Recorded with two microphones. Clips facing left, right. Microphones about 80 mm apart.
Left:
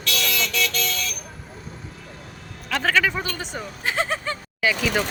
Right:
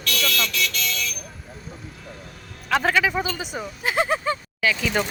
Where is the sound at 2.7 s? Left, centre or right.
Centre.